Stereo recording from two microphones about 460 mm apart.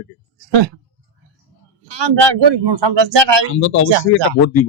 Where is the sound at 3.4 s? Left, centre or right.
Left.